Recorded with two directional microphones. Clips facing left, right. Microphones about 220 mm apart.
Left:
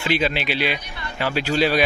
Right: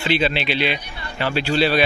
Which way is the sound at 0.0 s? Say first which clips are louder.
Right 1 dB; 10° left (ahead or behind).